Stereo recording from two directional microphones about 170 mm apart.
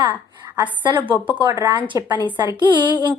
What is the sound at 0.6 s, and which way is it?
A woman's voice, 25° right (ahead or behind).